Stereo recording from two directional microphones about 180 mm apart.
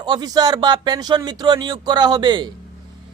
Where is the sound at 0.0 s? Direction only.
25° right (ahead or behind).